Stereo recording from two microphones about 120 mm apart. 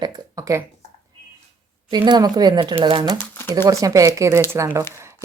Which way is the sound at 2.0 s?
35° right (ahead or behind).